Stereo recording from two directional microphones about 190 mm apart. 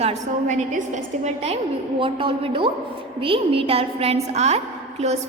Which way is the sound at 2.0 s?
30° right (ahead or behind).